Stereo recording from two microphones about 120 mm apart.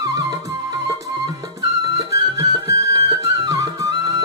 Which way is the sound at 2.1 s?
30° right (ahead or behind).